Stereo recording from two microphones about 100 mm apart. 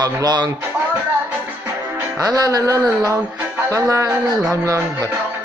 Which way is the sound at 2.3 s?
40° right (ahead or behind).